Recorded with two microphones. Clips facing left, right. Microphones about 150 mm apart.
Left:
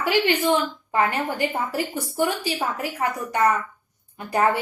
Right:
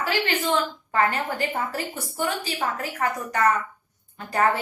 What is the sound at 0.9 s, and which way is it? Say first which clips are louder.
A woman's voice: left 1 dB; 15° left (ahead or behind).